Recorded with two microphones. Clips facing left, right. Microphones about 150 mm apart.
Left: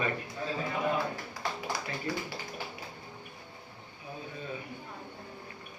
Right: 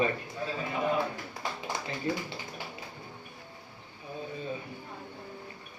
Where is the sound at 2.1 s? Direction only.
25° right (ahead or behind).